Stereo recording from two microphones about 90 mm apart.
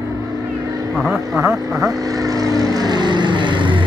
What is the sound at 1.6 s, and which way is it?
Speech, 40° right (ahead or behind).